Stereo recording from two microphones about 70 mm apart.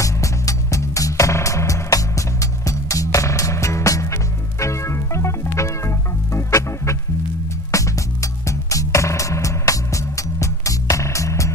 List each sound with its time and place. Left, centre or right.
0.0 s music: left